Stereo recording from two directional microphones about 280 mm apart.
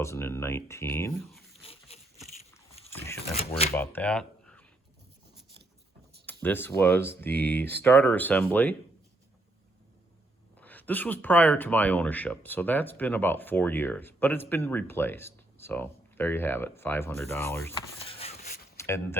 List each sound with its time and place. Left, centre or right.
0.0 s speech: centre
1.6 s a sound: left
2.5 s biting: centre
3.8 s speech: centre
6.2 s speech: centre
10.6 s speech: centre
18.0 s a sound: left
18.8 s speech: centre